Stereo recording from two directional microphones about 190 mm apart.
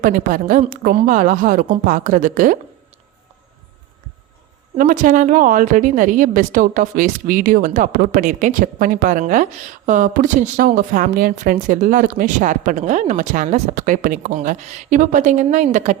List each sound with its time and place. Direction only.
0.0 s a woman's voice: 45° right (ahead or behind)
4.8 s a woman's voice: 45° right (ahead or behind)